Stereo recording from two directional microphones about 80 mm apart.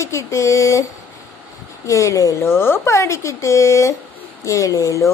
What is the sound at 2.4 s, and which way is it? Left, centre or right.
Speech, left.